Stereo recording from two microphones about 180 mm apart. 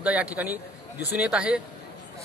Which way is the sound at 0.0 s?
5° right (ahead or behind).